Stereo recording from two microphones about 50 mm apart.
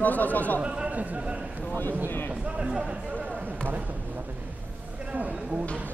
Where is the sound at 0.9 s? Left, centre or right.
Right.